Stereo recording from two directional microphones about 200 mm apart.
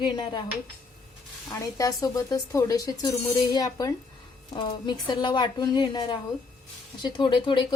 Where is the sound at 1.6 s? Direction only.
15° left (ahead or behind).